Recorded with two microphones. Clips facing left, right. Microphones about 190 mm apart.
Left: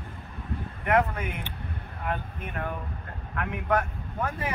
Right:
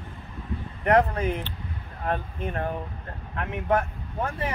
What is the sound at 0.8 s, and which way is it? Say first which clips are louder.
Speech: right 4 dB; 35° right (ahead or behind).